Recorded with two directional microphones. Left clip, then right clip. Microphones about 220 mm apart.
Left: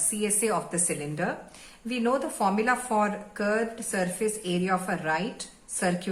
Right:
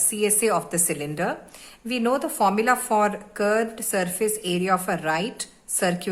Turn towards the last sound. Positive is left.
turn(degrees=-45)  # may be behind; listen again after turning